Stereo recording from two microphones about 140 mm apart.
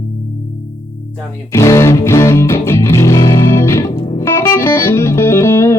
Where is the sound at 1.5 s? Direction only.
20° left (ahead or behind).